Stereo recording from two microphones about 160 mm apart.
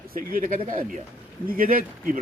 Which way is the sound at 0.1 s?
60° right (ahead or behind).